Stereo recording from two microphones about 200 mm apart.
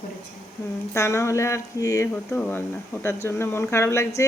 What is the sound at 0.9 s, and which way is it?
Speech, 15° left (ahead or behind).